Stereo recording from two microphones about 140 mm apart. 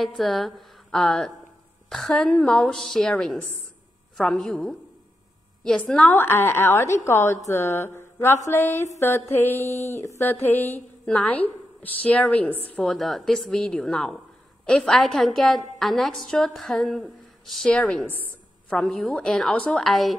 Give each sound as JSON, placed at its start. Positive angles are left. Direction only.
{"t": 0.0, "sound": "a woman's voice", "side_deg": 0}
{"t": 5.6, "sound": "a sound", "side_deg": 5}
{"t": 12.7, "sound": "a woman's voice", "side_deg": 0}